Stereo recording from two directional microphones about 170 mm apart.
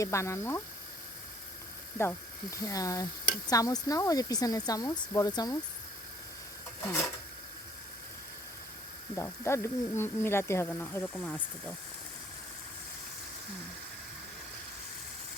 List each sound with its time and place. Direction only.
0.0 s speech: 15° left (ahead or behind)
2.0 s speech: 15° left (ahead or behind)
9.1 s speech: 15° left (ahead or behind)